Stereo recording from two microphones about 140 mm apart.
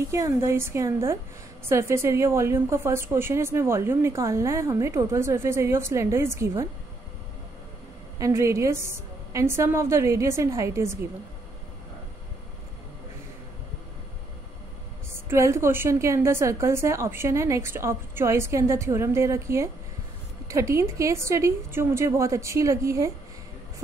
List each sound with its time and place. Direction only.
0.1 s a woman's voice: 20° right (ahead or behind)
8.2 s a woman's voice: 20° right (ahead or behind)
15.1 s a woman's voice: 20° right (ahead or behind)